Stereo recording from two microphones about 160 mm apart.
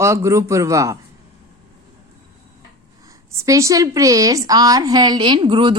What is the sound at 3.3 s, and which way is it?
A woman's voice, 20° right (ahead or behind).